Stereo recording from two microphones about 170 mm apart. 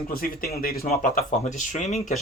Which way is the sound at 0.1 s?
60° left (ahead or behind).